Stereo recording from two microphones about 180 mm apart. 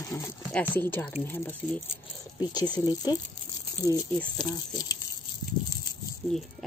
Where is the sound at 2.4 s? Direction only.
25° left (ahead or behind).